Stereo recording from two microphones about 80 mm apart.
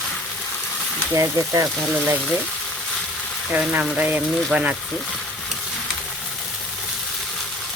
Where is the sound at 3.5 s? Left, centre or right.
Right.